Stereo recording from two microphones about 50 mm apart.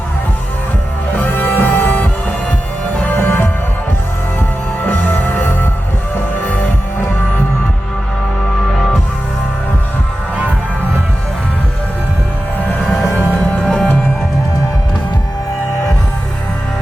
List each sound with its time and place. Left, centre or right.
1.2 s music: left
13.4 s music: centre